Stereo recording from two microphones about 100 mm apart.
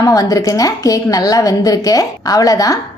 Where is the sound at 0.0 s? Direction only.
35° left (ahead or behind).